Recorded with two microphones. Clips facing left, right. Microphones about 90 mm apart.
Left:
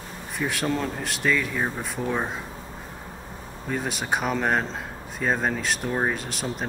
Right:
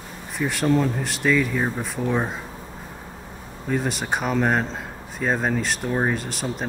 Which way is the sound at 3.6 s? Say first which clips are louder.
Right 3 dB; centre (ahead or behind).